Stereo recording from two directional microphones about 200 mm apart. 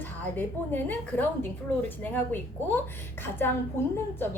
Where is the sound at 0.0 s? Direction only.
10° left (ahead or behind).